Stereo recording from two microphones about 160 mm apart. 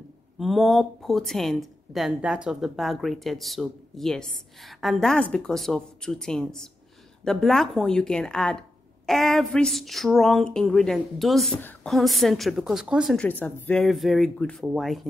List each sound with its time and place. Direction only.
0.4 s speech: centre (ahead or behind)